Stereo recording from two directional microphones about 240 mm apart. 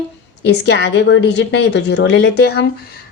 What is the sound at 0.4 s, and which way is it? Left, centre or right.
A woman's voice, left.